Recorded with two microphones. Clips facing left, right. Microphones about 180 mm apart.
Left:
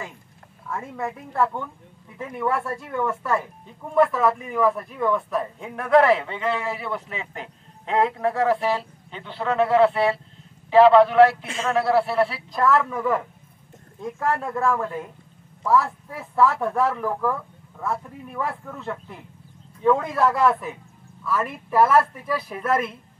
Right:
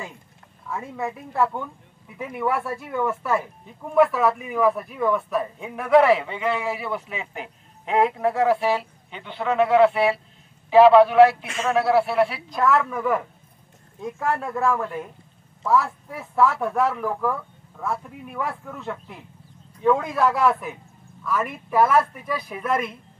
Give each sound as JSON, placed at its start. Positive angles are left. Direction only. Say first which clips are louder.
{"t": 0.7, "sound": "speech", "louder": "even", "side_deg": -5}